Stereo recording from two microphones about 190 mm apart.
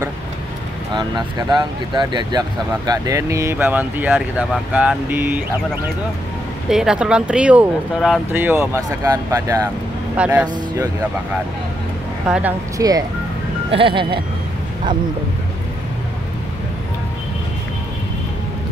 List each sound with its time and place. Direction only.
2.0 s speech: 25° right (ahead or behind)
6.7 s speech: 5° right (ahead or behind); by 9.7 s 20° right (ahead or behind)
10.1 s speech: 5° right (ahead or behind)
12.3 s speech: 10° right (ahead or behind)
13.7 s speech: 25° right (ahead or behind)